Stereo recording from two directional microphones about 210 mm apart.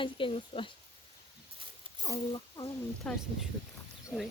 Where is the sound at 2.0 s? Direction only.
20° left (ahead or behind).